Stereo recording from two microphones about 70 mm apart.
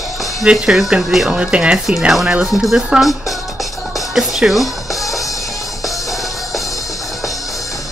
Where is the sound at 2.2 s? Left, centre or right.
Centre.